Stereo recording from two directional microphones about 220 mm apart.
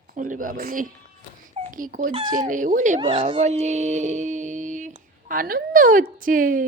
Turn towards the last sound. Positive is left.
turn(degrees=-40)  # may be behind; listen again after turning